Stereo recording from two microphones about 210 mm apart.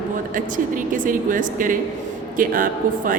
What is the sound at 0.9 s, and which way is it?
A woman's voice, 40° right (ahead or behind).